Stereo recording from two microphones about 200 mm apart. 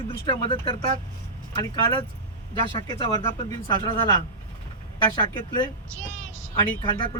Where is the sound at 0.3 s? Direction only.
25° left (ahead or behind).